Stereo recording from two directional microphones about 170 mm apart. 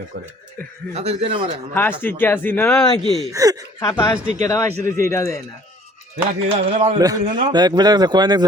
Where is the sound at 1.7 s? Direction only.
10° left (ahead or behind).